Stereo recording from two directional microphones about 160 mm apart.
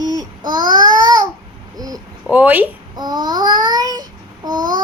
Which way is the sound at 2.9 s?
25° right (ahead or behind).